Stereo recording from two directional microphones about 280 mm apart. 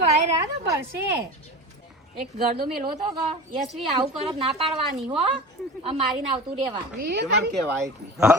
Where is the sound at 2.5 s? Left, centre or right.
Right.